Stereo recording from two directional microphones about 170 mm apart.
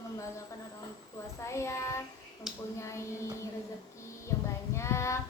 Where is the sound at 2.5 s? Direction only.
5° right (ahead or behind).